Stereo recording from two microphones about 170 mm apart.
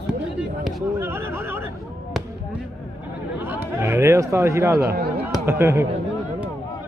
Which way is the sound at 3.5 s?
15° right (ahead or behind).